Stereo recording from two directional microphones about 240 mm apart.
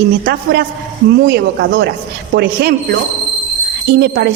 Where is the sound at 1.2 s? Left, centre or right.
Right.